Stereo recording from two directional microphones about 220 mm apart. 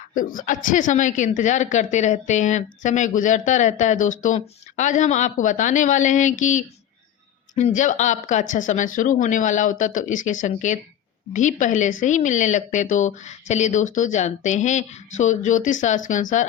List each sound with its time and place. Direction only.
0.1 s speech: 40° left (ahead or behind)